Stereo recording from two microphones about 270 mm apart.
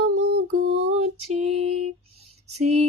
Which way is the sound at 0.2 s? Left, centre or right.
Right.